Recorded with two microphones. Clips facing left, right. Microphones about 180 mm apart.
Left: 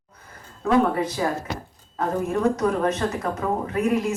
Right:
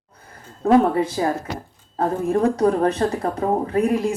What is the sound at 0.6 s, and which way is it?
A woman's voice, 30° right (ahead or behind).